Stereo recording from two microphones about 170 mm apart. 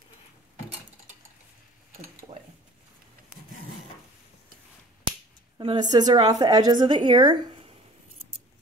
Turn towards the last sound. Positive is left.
turn(degrees=-30)  # may be behind; listen again after turning